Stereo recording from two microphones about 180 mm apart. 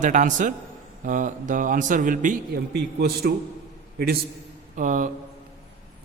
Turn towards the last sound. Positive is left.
turn(degrees=-45)  # may be behind; listen again after turning